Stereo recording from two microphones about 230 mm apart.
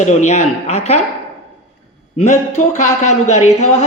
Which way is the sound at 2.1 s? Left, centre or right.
Left.